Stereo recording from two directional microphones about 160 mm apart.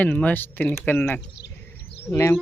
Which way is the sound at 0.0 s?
10° left (ahead or behind).